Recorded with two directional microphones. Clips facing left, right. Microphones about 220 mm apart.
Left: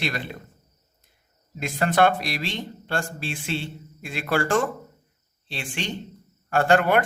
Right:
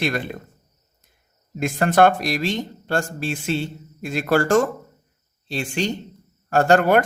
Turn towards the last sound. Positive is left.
turn(degrees=-40)  # may be behind; listen again after turning